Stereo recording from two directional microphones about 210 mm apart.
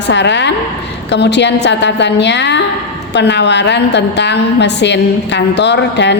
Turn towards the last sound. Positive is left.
turn(degrees=55)  # may be behind; listen again after turning